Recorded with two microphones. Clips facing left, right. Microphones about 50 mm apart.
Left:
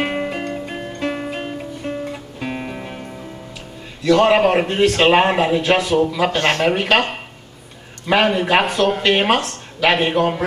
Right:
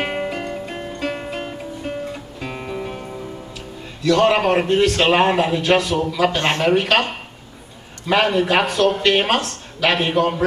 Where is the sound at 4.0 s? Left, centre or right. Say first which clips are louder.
Left 2 dB; centre.